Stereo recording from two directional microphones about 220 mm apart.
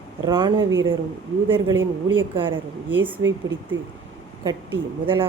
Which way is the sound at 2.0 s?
25° right (ahead or behind).